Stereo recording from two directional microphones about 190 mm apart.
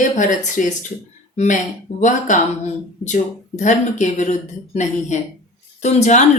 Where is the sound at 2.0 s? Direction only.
40° left (ahead or behind).